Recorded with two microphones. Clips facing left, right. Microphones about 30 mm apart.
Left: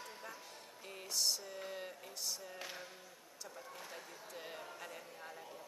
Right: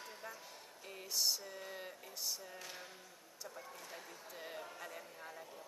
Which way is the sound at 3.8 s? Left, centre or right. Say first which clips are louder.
Left 1 dB; centre.